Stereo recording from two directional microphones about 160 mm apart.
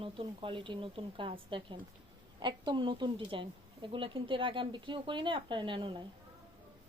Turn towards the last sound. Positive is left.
turn(degrees=-30)  # may be behind; listen again after turning